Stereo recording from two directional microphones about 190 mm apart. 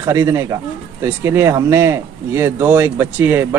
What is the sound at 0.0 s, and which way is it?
Speech, 15° right (ahead or behind).